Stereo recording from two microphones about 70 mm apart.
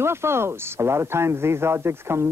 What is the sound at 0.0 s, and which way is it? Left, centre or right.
Speech, right.